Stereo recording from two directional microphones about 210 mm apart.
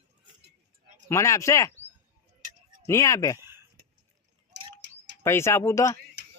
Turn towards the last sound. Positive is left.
turn(degrees=15)  # may be behind; listen again after turning